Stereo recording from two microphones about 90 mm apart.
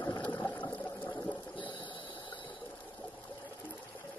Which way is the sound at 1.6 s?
65° left (ahead or behind).